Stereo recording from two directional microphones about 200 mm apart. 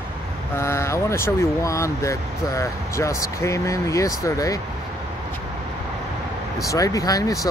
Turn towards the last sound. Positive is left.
turn(degrees=15)  # may be behind; listen again after turning